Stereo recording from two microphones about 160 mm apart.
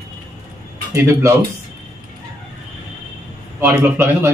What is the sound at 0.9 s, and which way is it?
Speech, 15° right (ahead or behind).